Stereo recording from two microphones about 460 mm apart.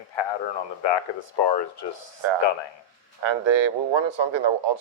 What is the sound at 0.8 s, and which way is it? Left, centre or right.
Speech, left.